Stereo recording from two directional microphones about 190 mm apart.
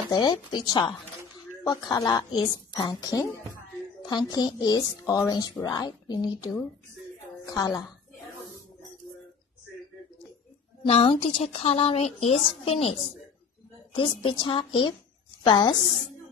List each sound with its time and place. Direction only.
0.1 s a woman's voice: 20° left (ahead or behind)
10.8 s a woman's voice: 25° left (ahead or behind)
13.9 s a woman's voice: 25° left (ahead or behind)